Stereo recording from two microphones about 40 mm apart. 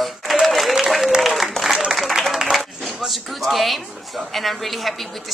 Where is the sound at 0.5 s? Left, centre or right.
Centre.